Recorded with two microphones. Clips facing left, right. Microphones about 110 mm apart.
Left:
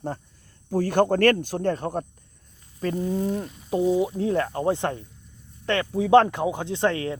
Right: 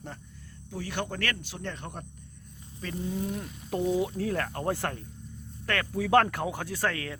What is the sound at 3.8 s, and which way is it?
Speech, 15° left (ahead or behind).